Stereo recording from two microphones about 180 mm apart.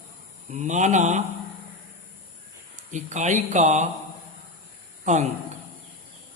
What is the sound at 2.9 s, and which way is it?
Speech, 40° right (ahead or behind).